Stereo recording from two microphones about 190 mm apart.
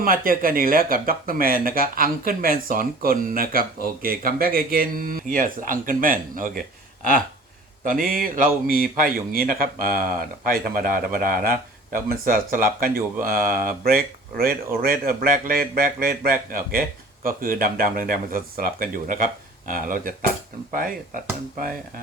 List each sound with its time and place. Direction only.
0.0 s speech: 50° right (ahead or behind)